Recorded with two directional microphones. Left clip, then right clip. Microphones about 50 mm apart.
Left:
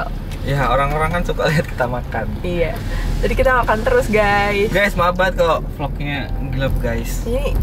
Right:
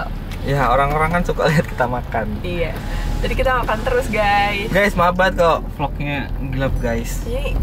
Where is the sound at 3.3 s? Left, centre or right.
Centre.